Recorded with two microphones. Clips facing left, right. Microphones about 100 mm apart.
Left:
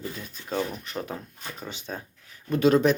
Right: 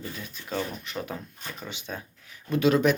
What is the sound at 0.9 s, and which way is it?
Speech, 35° left (ahead or behind).